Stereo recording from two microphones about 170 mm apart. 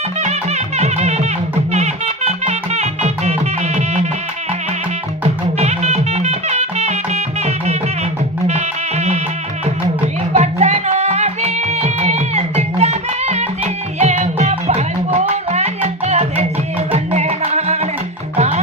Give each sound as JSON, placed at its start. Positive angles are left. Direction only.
{"t": 0.2, "sound": "music", "side_deg": -40}
{"t": 5.2, "sound": "music", "side_deg": -40}
{"t": 10.3, "sound": "music", "side_deg": -40}